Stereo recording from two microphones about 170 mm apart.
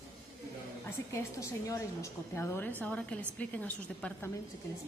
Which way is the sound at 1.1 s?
15° left (ahead or behind).